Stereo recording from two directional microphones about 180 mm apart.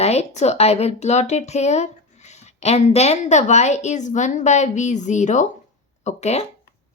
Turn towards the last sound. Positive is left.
turn(degrees=40)  # may be behind; listen again after turning